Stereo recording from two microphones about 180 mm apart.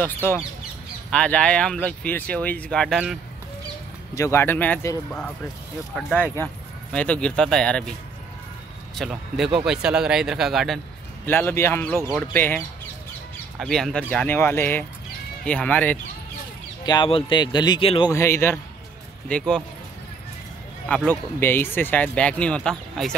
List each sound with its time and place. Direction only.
0.0 s speech: 10° left (ahead or behind)
4.1 s speech: 15° left (ahead or behind)
8.9 s speech: centre (ahead or behind)
11.2 s speech: 10° left (ahead or behind)
16.8 s speech: 25° left (ahead or behind)
18.1 s speech: 15° left (ahead or behind)
20.9 s speech: 10° left (ahead or behind)